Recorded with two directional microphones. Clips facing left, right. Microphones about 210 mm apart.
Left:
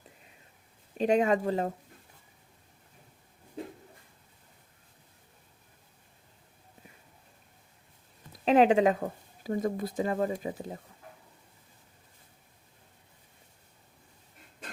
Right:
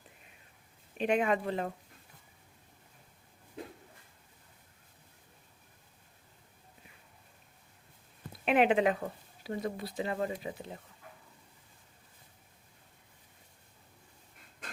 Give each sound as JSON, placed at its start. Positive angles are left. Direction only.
{"t": 0.9, "sound": "speech", "side_deg": 40}
{"t": 8.3, "sound": "a sound", "side_deg": 35}
{"t": 9.0, "sound": "speech", "side_deg": 45}